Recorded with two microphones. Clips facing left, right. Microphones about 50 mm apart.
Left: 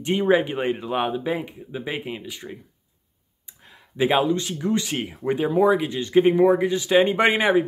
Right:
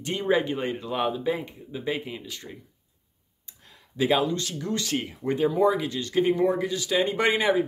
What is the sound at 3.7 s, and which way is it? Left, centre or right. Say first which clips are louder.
Speech: left 3 dB; left.